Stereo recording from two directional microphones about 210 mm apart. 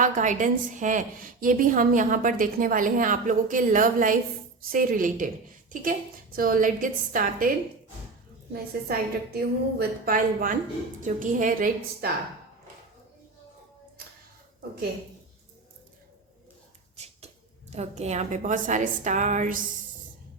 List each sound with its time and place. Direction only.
0.0 s a woman's voice: 35° right (ahead or behind)
8.5 s a woman's voice: 45° right (ahead or behind)
17.7 s a woman's voice: 30° right (ahead or behind)